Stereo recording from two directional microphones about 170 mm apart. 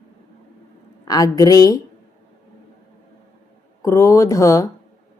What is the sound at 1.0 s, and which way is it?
Speech, 20° left (ahead or behind).